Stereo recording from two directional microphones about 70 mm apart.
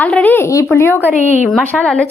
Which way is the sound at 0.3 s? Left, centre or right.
Left.